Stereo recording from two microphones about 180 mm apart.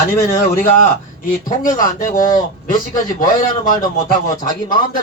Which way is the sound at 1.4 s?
45° left (ahead or behind).